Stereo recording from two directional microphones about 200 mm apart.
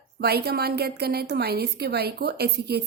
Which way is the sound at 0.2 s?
50° right (ahead or behind).